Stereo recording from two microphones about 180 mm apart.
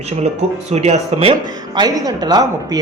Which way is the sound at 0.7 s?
35° right (ahead or behind).